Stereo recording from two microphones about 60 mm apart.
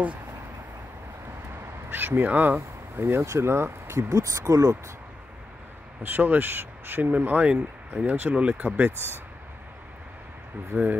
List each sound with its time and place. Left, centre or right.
1.9 s speech: right
3.0 s speech: right
4.1 s speech: right
6.0 s speech: right
10.7 s speech: right